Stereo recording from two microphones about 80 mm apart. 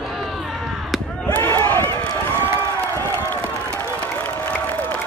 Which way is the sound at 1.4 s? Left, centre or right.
Left.